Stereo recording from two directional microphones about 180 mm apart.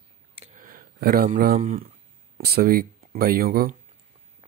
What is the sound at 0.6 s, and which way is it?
Speech, 50° right (ahead or behind).